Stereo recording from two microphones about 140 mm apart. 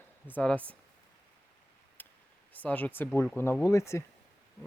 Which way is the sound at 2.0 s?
15° left (ahead or behind).